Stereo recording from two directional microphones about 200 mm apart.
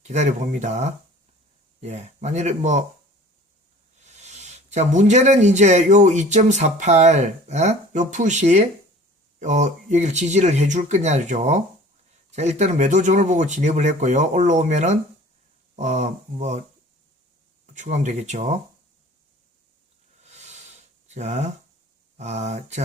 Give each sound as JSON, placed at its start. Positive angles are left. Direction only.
{"t": 0.0, "sound": "speech", "side_deg": -35}
{"t": 4.0, "sound": "speech", "side_deg": -35}
{"t": 17.7, "sound": "speech", "side_deg": -35}
{"t": 20.2, "sound": "a sound", "side_deg": -35}
{"t": 22.2, "sound": "speech", "side_deg": -35}